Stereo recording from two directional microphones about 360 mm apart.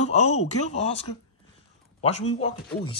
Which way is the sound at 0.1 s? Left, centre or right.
Centre.